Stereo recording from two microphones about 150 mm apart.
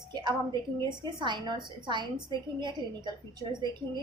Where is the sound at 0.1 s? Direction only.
30° right (ahead or behind).